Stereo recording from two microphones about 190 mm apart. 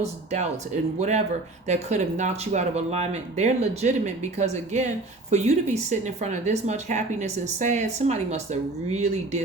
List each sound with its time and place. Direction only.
0.0 s speech: 35° right (ahead or behind)